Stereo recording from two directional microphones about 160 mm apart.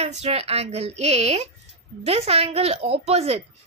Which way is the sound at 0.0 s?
45° right (ahead or behind).